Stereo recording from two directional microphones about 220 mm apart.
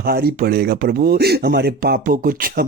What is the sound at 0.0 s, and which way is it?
Speech, 45° right (ahead or behind).